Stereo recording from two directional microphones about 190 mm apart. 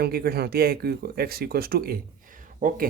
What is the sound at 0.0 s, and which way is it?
Speech, 55° right (ahead or behind).